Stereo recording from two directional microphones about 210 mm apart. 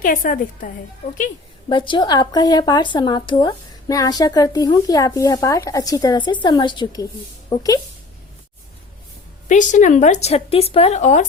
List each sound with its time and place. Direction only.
0.0 s speech: 40° left (ahead or behind)
1.7 s speech: 25° left (ahead or behind)
9.5 s speech: 35° left (ahead or behind)